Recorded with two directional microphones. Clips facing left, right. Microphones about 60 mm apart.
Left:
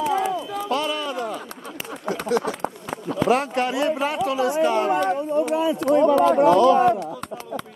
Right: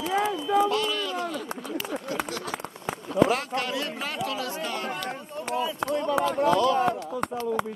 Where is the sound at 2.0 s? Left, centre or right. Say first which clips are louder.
Left 8 dB; left.